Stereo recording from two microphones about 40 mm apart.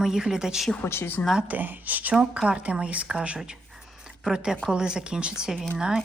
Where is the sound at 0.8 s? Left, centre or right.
Left.